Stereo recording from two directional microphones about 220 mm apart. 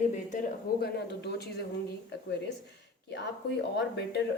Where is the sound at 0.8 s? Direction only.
50° left (ahead or behind).